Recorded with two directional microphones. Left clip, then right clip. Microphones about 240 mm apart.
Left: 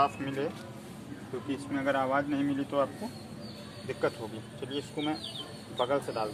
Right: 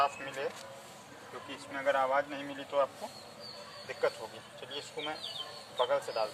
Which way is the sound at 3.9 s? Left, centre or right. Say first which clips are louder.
Left 2 dB; centre.